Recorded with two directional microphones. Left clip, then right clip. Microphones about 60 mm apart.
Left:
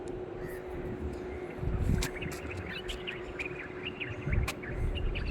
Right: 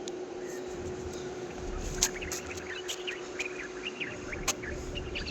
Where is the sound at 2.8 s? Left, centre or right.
Right.